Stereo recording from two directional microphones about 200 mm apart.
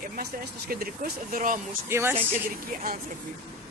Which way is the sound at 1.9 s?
10° right (ahead or behind).